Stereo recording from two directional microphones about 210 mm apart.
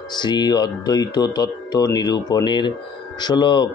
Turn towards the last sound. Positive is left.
turn(degrees=20)  # may be behind; listen again after turning